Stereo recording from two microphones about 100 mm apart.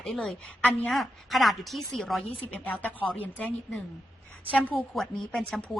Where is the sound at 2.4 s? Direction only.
15° left (ahead or behind).